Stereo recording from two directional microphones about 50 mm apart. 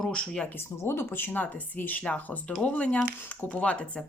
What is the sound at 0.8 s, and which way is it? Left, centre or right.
Speech, left.